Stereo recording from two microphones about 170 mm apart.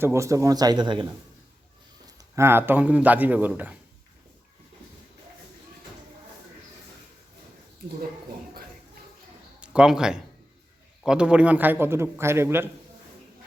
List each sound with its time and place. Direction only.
0.0 s speech: 15° right (ahead or behind)
2.1 s a man's voice: 15° right (ahead or behind)
9.6 s a man's voice: 5° right (ahead or behind)